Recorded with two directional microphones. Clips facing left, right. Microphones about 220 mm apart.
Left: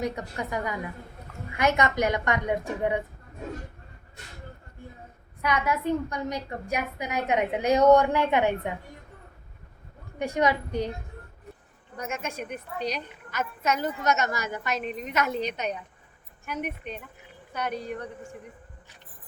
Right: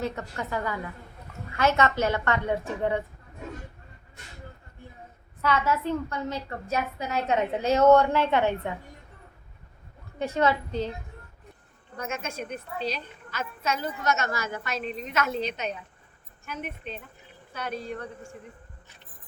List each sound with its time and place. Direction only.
0.0 s a woman's voice: 15° left (ahead or behind)
5.4 s a woman's voice: 15° left (ahead or behind)
10.2 s a woman's voice: 15° left (ahead or behind)
11.9 s a woman's voice: 15° left (ahead or behind)